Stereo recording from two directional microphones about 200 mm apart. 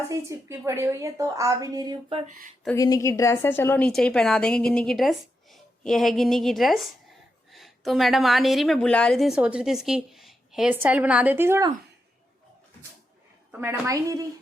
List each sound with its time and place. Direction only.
0.1 s a woman's voice: 15° right (ahead or behind)
2.7 s a woman's voice: 15° left (ahead or behind); by 11.7 s 10° right (ahead or behind)
13.5 s a woman's voice: 10° right (ahead or behind)